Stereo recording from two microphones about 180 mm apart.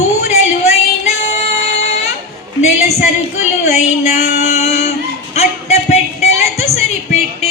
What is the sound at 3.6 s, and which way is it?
Child singing, 40° left (ahead or behind).